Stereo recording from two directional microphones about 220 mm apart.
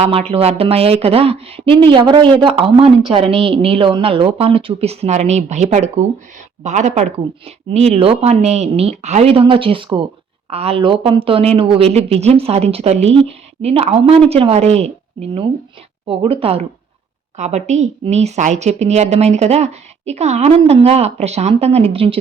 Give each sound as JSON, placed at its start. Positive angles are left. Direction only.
{"t": 0.0, "sound": "a woman's voice", "side_deg": -25}